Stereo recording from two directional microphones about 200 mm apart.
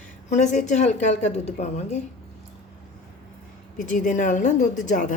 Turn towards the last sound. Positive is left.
turn(degrees=40)  # may be behind; listen again after turning